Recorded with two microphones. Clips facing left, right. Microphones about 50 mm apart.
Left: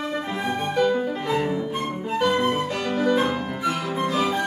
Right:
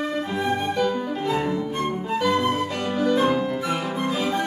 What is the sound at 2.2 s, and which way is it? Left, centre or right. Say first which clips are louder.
Music: left 1 dB; centre.